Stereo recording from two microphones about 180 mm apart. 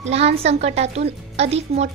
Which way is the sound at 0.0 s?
35° right (ahead or behind).